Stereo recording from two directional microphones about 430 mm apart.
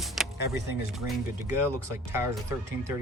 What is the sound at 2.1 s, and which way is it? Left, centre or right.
Speech, centre.